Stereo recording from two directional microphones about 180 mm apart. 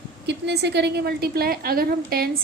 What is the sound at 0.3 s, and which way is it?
A woman's voice, 70° right (ahead or behind).